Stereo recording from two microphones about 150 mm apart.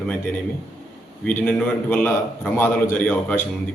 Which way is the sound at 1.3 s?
10° left (ahead or behind).